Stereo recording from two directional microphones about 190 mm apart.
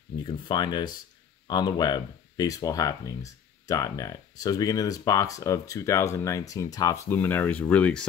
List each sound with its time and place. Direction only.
0.2 s speech: 25° left (ahead or behind); by 8.1 s 5° left (ahead or behind)